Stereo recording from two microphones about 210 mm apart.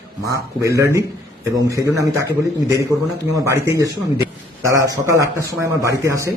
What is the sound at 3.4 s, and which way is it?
Speech, 15° right (ahead or behind).